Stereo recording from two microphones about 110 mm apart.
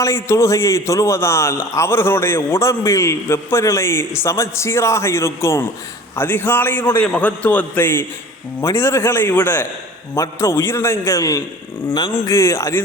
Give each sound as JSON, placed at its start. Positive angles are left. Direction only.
{"t": 0.0, "sound": "a man's voice", "side_deg": 25}